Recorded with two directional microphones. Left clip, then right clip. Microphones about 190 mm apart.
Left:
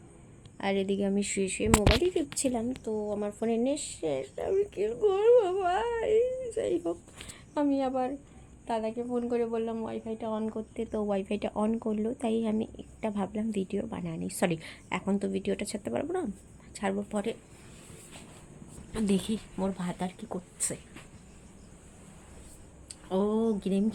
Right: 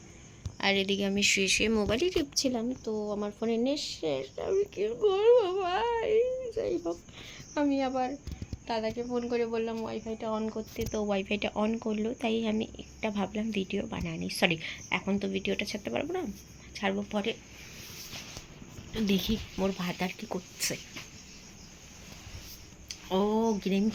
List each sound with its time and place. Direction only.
0.6 s speech: 20° left (ahead or behind)
1.5 s a woman's voice: 10° left (ahead or behind)
18.9 s a woman's voice: 5° left (ahead or behind)
22.9 s speech: centre (ahead or behind)